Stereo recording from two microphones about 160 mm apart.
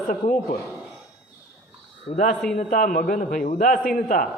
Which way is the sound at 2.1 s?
75° left (ahead or behind).